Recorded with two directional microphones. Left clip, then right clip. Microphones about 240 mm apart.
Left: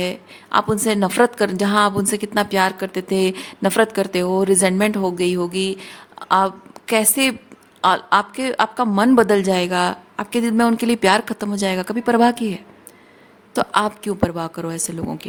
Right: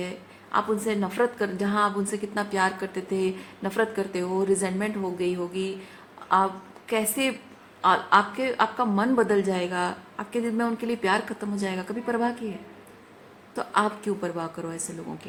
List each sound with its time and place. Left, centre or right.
0.0 s a woman's voice: left
13.6 s a woman's voice: left